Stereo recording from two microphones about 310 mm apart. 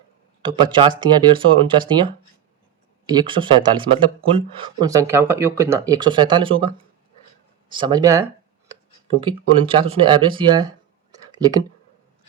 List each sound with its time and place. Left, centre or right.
0.4 s speech: centre
3.2 s speech: centre
7.7 s speech: centre